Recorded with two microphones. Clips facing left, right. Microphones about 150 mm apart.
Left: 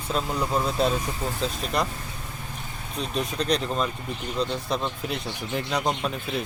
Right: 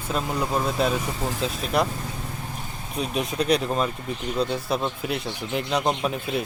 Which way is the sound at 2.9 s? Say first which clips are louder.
Right 2 dB; 10° right (ahead or behind).